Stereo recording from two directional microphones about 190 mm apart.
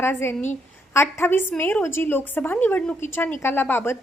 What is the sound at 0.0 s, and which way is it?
A woman's voice, 10° left (ahead or behind).